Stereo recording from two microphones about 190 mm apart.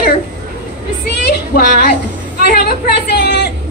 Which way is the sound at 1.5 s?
55° left (ahead or behind).